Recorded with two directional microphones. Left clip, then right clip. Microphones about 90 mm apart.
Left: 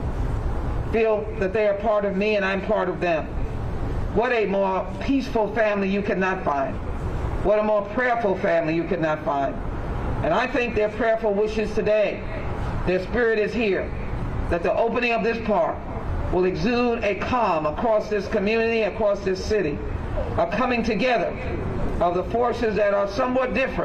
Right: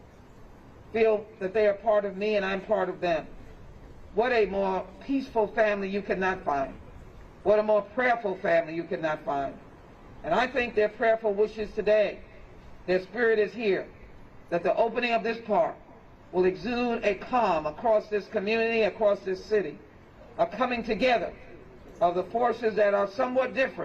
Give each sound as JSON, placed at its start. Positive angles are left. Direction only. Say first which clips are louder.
{"t": 0.9, "sound": "a man's voice", "louder": "left 3 dB", "side_deg": -30}